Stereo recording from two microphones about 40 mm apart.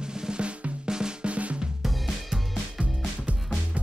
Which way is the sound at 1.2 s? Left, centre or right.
Right.